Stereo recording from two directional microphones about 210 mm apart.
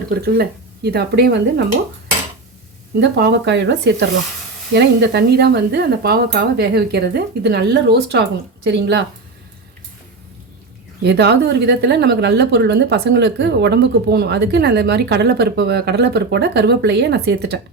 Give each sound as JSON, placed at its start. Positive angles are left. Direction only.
{"t": 0.1, "sound": "a woman's voice", "side_deg": -50}
{"t": 2.9, "sound": "a woman's voice", "side_deg": -55}
{"t": 11.0, "sound": "a woman's voice", "side_deg": -55}